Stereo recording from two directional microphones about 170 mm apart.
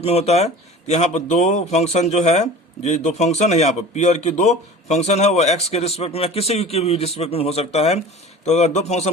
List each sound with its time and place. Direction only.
0.0 s speech: 40° left (ahead or behind)